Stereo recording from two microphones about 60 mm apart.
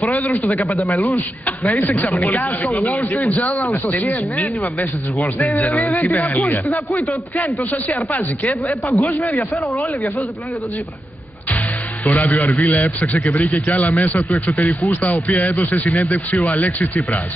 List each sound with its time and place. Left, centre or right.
0.0 s speech: left
2.3 s speech: left
8.6 s speech: left
9.0 s speech: left
12.0 s speech: left